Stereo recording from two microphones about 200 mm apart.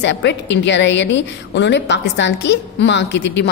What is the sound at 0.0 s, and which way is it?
A woman's voice, 60° left (ahead or behind).